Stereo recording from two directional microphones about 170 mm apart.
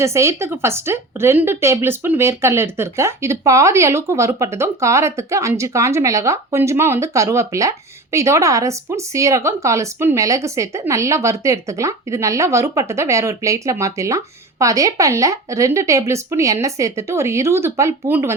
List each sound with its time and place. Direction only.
0.0 s a woman's voice: 15° right (ahead or behind)